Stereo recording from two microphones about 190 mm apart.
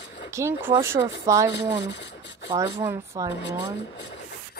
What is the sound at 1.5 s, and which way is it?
Speech, 65° left (ahead or behind).